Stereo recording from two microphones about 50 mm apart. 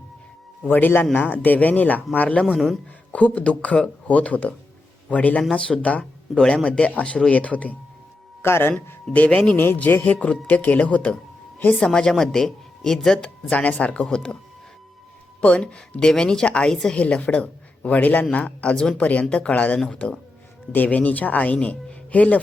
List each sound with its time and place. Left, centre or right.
0.7 s a man's voice: left
5.4 s a man's voice: centre
8.4 s speech: left
9.1 s a man's voice: left
9.6 s speech: left
9.8 s speech: left
11.8 s a woman's voice: centre
13.5 s a man's voice: left
15.4 s a man's voice: left
17.0 s a man's voice: left